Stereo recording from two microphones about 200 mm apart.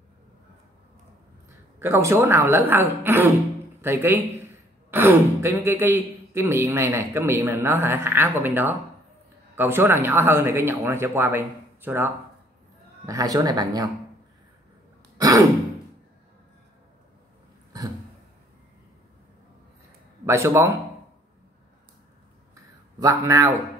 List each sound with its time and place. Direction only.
1.8 s speech: 15° right (ahead or behind)
15.1 s sigh: 15° right (ahead or behind)
20.2 s speech: 15° right (ahead or behind)
22.9 s speech: 15° right (ahead or behind)